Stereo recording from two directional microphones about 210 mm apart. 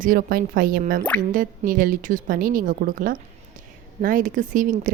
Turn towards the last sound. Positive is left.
turn(degrees=-40)  # may be behind; listen again after turning